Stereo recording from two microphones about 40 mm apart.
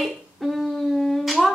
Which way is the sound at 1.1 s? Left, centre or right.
Centre.